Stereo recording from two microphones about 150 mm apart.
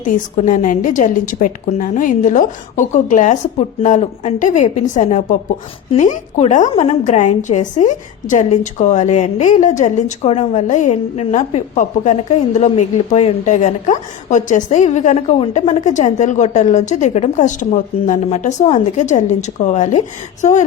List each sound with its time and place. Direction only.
0.0 s a woman's voice: 60° left (ahead or behind)
18.3 s a woman's voice: 50° left (ahead or behind)